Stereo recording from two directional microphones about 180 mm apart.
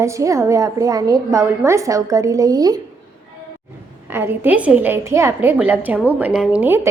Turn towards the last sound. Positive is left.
turn(degrees=-10)  # may be behind; listen again after turning